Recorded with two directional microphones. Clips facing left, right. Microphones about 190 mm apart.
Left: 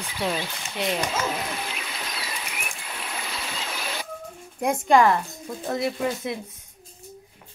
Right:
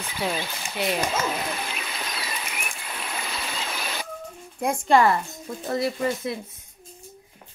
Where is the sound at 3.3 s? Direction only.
50° right (ahead or behind).